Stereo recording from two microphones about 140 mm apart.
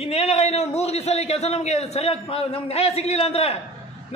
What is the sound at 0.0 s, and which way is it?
A man's voice, 50° left (ahead or behind).